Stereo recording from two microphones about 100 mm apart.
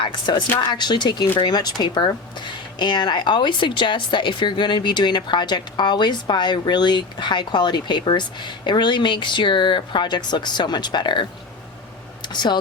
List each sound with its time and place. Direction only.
0.0 s speech: 50° left (ahead or behind)